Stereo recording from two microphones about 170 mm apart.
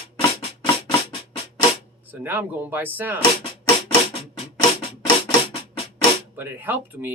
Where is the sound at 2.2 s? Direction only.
10° right (ahead or behind).